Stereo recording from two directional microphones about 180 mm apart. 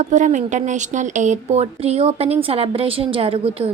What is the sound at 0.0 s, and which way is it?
A woman's voice, 40° right (ahead or behind).